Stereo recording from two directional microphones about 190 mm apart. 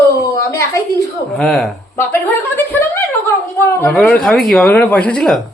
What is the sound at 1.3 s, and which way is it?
A woman's voice, centre (ahead or behind).